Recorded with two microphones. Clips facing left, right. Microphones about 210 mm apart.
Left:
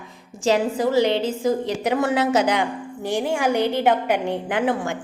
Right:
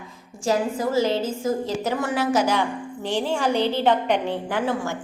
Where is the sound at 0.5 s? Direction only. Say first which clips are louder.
Left 3 dB; 70° left (ahead or behind).